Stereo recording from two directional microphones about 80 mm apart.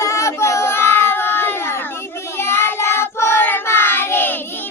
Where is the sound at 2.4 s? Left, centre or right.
Left.